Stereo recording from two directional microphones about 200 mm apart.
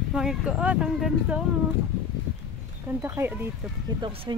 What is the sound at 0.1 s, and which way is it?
Speech, centre (ahead or behind).